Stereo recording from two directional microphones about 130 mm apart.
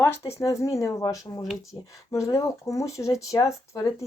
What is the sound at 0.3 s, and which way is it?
A woman's voice, 20° left (ahead or behind).